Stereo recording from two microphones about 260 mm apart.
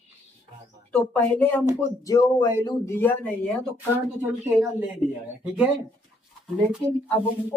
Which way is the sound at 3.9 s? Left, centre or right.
Centre.